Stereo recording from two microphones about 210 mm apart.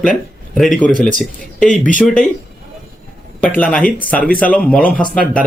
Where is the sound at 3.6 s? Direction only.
5° left (ahead or behind).